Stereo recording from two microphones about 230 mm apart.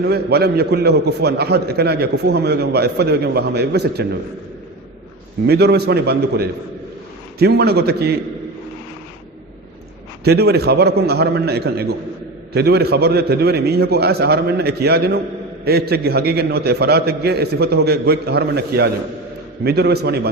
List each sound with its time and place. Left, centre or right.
0.1 s a man's voice: right
5.5 s a man's voice: right
10.2 s a man's voice: right